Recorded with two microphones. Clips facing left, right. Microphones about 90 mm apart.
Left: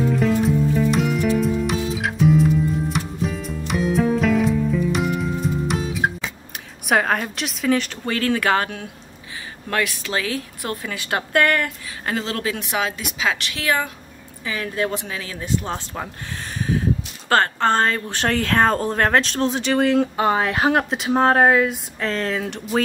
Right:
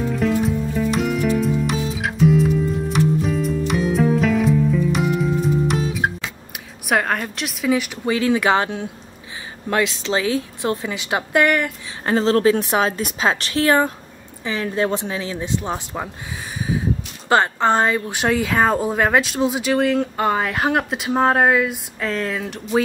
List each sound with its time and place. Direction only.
0.0 s music: centre (ahead or behind)
6.9 s a woman's voice: centre (ahead or behind); by 11.7 s 15° right (ahead or behind)
12.1 s a woman's voice: 35° right (ahead or behind); by 16.1 s 15° right (ahead or behind)
16.5 s a sound: 10° right (ahead or behind)
17.3 s speech: 15° right (ahead or behind)